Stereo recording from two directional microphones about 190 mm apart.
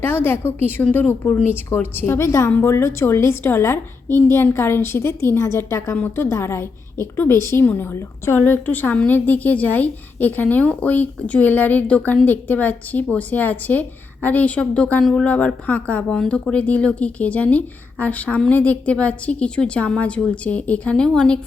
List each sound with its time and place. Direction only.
0.0 s a woman's voice: 10° left (ahead or behind)